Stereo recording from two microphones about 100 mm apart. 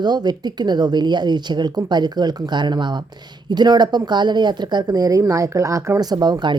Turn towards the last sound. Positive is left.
turn(degrees=-45)  # may be behind; listen again after turning